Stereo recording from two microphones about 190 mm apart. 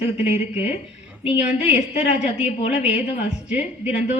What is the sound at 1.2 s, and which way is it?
Speech, 5° right (ahead or behind).